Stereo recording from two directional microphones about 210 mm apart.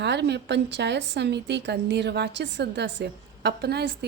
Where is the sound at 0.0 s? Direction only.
55° right (ahead or behind).